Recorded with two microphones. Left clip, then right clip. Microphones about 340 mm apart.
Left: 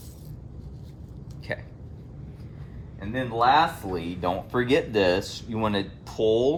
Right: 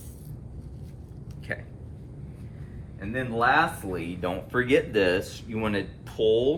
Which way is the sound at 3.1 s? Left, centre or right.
Left.